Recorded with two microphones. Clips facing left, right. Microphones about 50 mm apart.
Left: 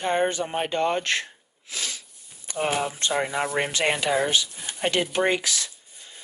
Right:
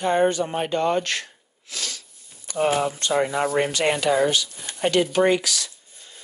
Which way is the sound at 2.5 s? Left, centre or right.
Left.